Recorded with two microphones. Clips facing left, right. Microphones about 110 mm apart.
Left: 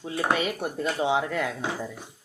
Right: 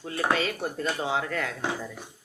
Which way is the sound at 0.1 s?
20° left (ahead or behind).